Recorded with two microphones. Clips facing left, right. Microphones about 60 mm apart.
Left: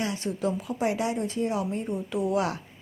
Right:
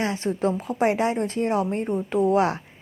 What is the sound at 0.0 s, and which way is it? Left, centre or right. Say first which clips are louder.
A woman's voice: right 5 dB; right.